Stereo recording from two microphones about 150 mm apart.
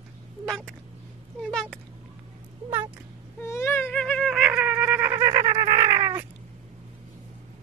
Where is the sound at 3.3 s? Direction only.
15° left (ahead or behind); by 5.2 s 15° right (ahead or behind).